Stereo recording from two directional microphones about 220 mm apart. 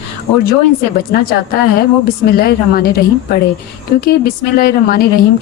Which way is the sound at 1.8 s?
45° left (ahead or behind).